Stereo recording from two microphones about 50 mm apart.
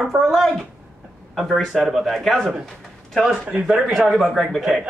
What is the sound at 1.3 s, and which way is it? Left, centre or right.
A man's voice, centre.